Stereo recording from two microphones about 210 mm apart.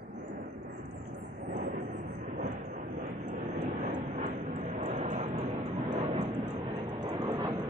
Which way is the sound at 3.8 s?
35° right (ahead or behind).